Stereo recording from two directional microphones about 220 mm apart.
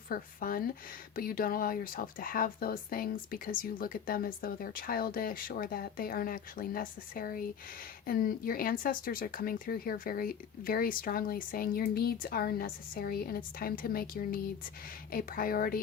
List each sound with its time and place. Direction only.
0.1 s speech: 40° left (ahead or behind)